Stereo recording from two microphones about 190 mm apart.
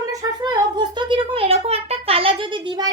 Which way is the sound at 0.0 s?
20° right (ahead or behind).